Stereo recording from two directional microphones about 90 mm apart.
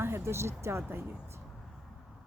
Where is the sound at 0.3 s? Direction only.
30° right (ahead or behind).